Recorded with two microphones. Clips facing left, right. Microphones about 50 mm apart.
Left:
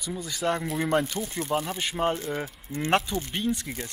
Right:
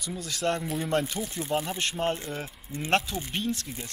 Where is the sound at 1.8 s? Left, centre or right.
Centre.